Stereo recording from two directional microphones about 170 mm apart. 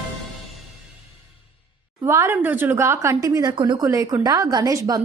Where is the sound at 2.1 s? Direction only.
15° right (ahead or behind).